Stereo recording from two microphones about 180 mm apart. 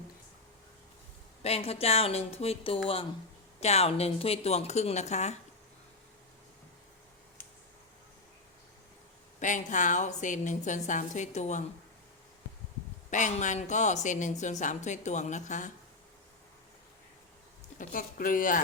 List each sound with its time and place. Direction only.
1.4 s a woman's voice: 35° left (ahead or behind)
9.4 s a woman's voice: 45° left (ahead or behind)
13.1 s a woman's voice: 45° left (ahead or behind)
17.7 s a woman's voice: 50° left (ahead or behind)